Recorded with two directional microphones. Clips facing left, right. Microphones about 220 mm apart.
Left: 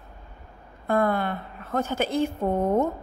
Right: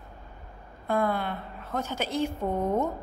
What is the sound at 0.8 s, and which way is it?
A woman's voice, 55° left (ahead or behind).